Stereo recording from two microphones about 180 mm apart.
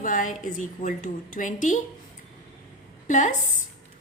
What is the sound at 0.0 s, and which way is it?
A woman's voice, 45° left (ahead or behind).